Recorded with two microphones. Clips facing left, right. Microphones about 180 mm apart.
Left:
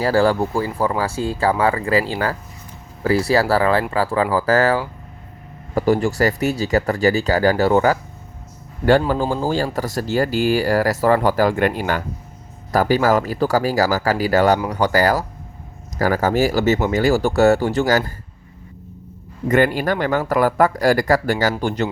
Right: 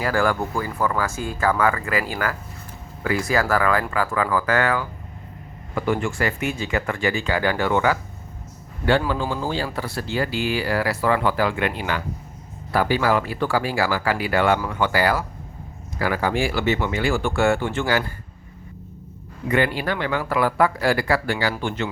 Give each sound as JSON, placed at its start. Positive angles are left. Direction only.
{"t": 0.0, "sound": "speech", "side_deg": 35}
{"t": 19.5, "sound": "speech", "side_deg": 45}